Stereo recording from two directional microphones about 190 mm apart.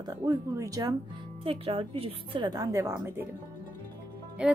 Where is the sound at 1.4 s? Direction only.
30° right (ahead or behind); by 3.3 s 15° right (ahead or behind).